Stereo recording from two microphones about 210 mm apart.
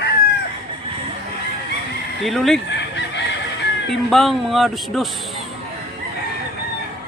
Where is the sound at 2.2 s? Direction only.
Centre (ahead or behind).